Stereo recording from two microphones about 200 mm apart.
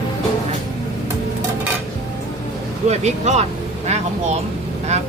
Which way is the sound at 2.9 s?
35° right (ahead or behind).